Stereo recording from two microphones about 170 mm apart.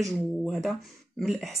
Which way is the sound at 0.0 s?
Centre (ahead or behind).